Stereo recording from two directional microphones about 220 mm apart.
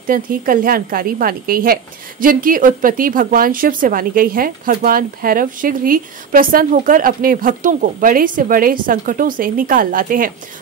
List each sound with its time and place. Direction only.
0.0 s a woman's voice: 40° right (ahead or behind)